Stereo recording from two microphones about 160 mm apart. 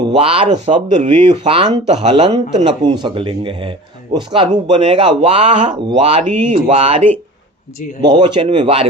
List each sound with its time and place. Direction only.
0.0 s speech: 35° right (ahead or behind)
8.0 s speech: 30° right (ahead or behind)